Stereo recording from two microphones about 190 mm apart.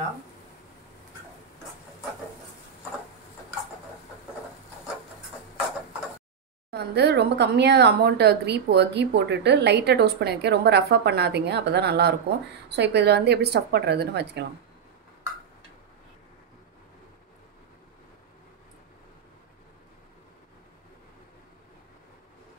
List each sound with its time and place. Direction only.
6.7 s speech: 60° right (ahead or behind)